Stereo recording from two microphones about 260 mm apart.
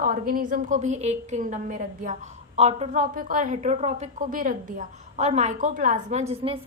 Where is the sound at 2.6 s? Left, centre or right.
Right.